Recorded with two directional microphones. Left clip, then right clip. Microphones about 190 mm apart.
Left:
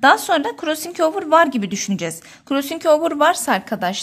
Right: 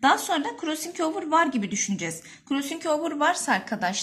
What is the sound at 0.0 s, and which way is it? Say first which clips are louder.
A woman's voice: left 8 dB; 50° left (ahead or behind).